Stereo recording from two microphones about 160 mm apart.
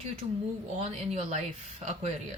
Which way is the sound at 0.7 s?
45° right (ahead or behind).